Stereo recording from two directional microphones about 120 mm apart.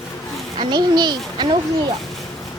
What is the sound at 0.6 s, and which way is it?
Speech, 35° right (ahead or behind).